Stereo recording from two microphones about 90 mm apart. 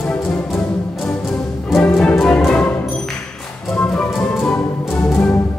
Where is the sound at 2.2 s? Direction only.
10° left (ahead or behind).